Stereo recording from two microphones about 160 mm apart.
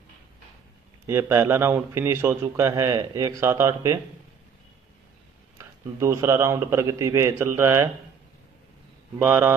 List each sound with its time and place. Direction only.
1.0 s a man's voice: 15° right (ahead or behind)
5.6 s a man's voice: 15° right (ahead or behind)
9.2 s a man's voice: 15° right (ahead or behind)